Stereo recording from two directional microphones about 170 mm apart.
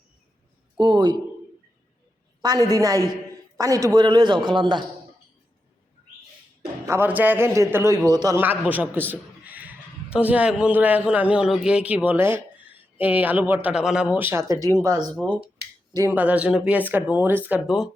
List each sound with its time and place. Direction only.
0.8 s a man's voice: 25° right (ahead or behind)
2.7 s a man's voice: 20° right (ahead or behind)
6.8 s a man's voice: 15° right (ahead or behind)
8.4 s a man's voice: 10° right (ahead or behind)
15.1 s a man's voice: centre (ahead or behind)